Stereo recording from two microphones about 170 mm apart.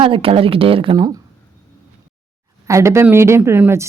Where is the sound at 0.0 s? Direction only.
30° right (ahead or behind).